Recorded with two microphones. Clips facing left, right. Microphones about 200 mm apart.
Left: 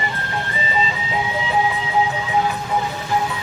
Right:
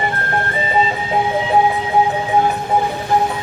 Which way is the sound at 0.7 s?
50° right (ahead or behind).